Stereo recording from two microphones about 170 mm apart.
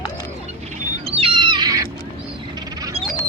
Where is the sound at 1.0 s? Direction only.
35° right (ahead or behind).